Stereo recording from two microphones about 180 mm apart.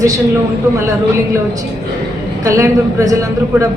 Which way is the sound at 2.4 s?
15° right (ahead or behind).